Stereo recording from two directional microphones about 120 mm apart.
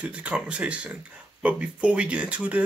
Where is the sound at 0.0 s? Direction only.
10° right (ahead or behind).